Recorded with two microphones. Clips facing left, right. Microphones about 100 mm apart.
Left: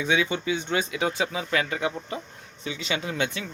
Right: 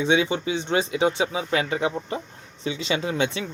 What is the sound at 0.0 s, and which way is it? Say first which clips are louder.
Speech: right 3 dB; 25° right (ahead or behind).